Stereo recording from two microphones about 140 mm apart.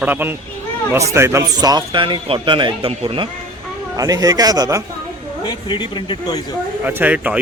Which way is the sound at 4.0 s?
25° right (ahead or behind).